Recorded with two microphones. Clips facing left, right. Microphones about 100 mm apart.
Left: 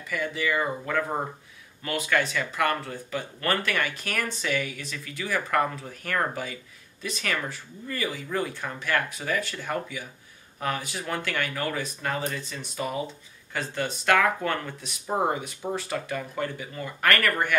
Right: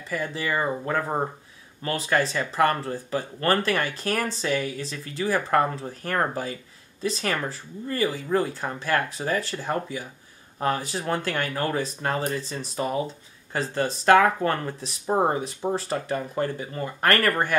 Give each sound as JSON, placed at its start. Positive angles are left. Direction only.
{"t": 0.1, "sound": "speech", "side_deg": -35}